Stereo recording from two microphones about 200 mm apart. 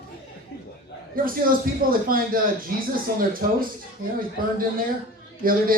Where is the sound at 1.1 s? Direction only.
45° right (ahead or behind).